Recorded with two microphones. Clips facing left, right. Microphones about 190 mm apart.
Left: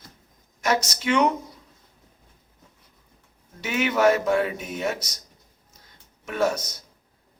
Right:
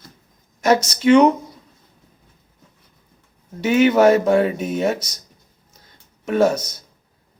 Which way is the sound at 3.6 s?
30° right (ahead or behind).